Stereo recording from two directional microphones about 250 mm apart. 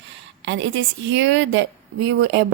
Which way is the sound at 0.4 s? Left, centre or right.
Right.